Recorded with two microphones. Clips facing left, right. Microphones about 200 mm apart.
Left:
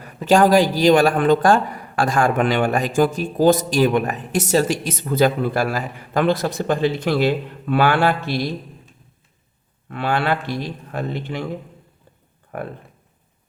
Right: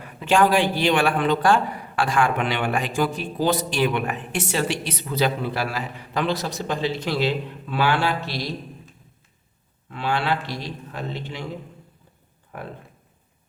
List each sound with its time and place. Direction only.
0.0 s a man's voice: 40° left (ahead or behind)
9.9 s a man's voice: 55° left (ahead or behind)
12.5 s speech: 55° left (ahead or behind)